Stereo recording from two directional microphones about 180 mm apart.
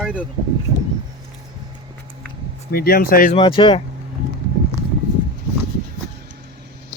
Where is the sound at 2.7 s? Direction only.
55° left (ahead or behind).